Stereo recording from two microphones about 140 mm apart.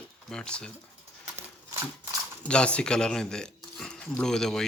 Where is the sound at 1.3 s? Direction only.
20° right (ahead or behind).